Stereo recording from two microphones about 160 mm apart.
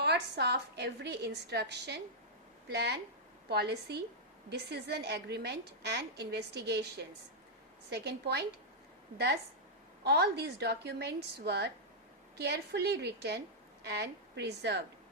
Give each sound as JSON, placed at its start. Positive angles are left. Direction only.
{"t": 0.0, "sound": "a woman's voice", "side_deg": -90}